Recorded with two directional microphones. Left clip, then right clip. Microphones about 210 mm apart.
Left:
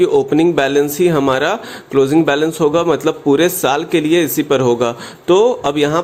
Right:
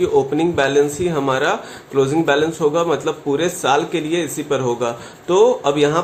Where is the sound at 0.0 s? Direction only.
40° left (ahead or behind).